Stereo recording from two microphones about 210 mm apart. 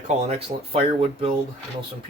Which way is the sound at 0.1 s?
30° right (ahead or behind).